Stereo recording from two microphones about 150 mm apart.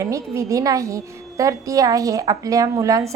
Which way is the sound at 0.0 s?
20° right (ahead or behind).